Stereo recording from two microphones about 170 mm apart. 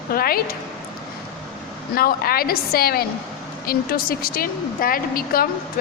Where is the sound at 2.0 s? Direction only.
60° left (ahead or behind).